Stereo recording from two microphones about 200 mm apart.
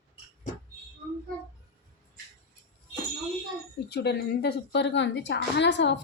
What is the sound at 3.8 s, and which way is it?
A woman's voice, 55° left (ahead or behind).